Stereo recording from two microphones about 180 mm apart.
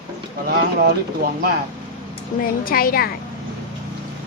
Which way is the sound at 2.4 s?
55° left (ahead or behind).